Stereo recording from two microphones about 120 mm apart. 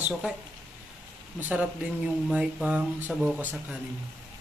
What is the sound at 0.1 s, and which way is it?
Speech, 5° right (ahead or behind).